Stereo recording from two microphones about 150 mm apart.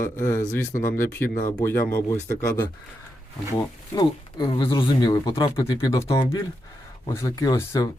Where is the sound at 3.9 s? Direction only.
30° left (ahead or behind).